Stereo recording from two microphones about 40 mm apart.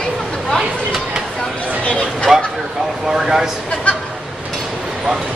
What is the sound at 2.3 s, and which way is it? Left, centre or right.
Speech, centre.